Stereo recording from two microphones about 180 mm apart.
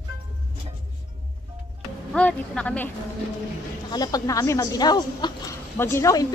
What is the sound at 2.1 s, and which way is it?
Speech, 5° left (ahead or behind).